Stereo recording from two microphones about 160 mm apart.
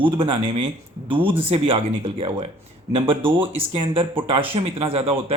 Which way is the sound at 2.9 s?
35° right (ahead or behind).